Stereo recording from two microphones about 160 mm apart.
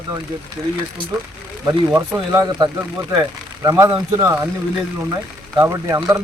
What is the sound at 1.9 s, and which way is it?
Speech, 20° right (ahead or behind).